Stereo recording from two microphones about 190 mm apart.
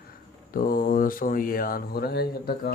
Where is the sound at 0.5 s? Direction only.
50° left (ahead or behind).